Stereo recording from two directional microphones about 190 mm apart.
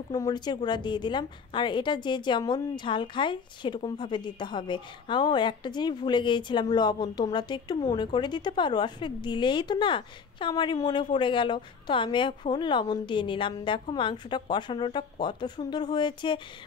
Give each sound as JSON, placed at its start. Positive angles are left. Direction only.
{"t": 0.1, "sound": "a woman's voice", "side_deg": 20}